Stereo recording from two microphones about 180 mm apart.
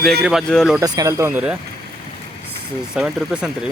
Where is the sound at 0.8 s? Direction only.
20° right (ahead or behind).